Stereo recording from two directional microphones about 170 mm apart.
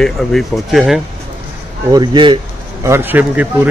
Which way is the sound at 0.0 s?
Centre (ahead or behind).